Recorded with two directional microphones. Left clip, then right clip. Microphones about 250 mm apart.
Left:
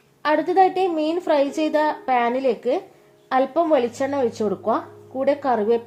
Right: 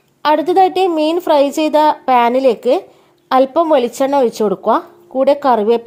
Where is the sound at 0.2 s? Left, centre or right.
Right.